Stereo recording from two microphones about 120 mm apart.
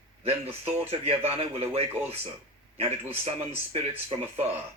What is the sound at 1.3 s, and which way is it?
Speech, 55° right (ahead or behind).